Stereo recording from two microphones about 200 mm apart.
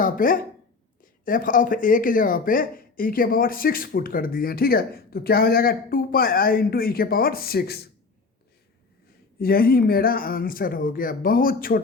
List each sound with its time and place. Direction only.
0.0 s speech: 45° left (ahead or behind)
9.4 s speech: 50° left (ahead or behind)